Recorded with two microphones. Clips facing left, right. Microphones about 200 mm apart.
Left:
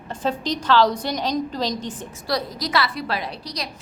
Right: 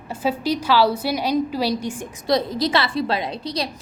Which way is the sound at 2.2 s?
25° right (ahead or behind).